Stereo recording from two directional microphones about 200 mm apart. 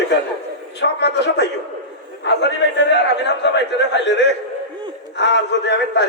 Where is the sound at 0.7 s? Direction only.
60° left (ahead or behind).